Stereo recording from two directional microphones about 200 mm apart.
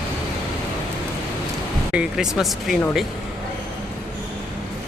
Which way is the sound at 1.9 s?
5° right (ahead or behind).